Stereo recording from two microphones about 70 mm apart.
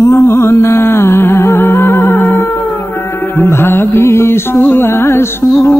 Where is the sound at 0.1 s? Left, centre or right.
Left.